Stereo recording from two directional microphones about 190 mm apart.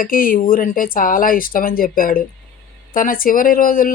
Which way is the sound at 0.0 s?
45° left (ahead or behind).